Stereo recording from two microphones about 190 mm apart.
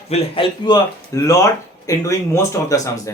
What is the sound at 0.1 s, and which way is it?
Speech, 30° left (ahead or behind).